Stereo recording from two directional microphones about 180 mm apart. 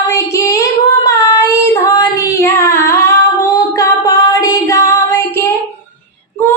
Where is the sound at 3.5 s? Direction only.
20° left (ahead or behind).